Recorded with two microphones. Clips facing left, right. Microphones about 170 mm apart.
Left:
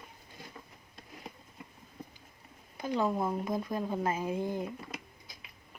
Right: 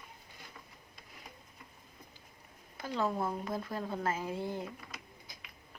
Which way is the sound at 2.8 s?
15° left (ahead or behind).